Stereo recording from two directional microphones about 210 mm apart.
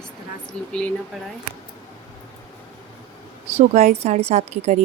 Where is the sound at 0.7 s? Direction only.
5° left (ahead or behind).